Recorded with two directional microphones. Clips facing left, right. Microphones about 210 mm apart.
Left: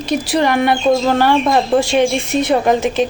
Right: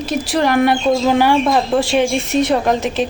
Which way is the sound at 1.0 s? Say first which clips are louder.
Even; 10° right (ahead or behind).